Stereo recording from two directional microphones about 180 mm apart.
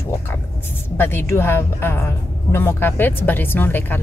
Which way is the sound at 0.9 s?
10° left (ahead or behind).